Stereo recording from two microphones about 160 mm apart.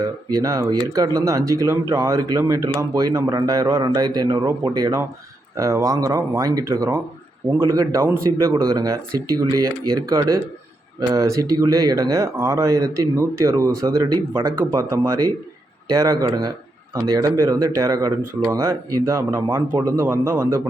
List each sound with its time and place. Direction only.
0.3 s speech: 20° right (ahead or behind)